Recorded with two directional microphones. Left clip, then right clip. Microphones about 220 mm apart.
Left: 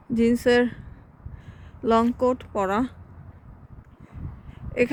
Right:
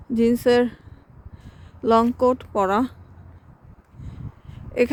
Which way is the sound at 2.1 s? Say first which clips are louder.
Right 4 dB; 20° right (ahead or behind).